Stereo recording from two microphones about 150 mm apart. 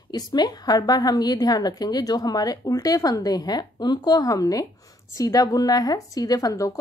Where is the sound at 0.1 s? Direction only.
25° left (ahead or behind).